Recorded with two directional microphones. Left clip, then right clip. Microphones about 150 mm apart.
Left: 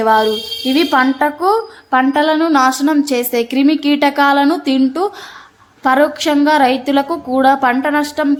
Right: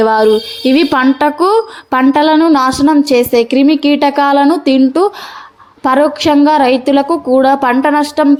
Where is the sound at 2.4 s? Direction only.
30° right (ahead or behind).